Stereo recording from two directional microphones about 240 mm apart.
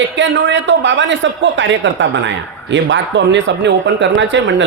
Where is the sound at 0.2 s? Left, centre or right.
Right.